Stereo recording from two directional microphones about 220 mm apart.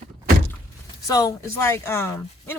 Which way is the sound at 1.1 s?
15° left (ahead or behind).